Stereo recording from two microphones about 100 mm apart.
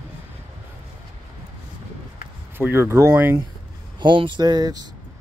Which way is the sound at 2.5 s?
25° right (ahead or behind).